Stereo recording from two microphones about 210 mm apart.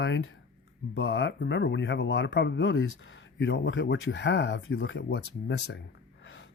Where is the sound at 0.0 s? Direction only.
60° left (ahead or behind).